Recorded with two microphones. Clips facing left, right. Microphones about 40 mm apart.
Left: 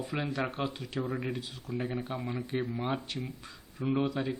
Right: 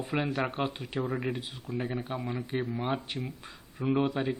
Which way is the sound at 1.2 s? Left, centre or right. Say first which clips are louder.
Right 2 dB; centre.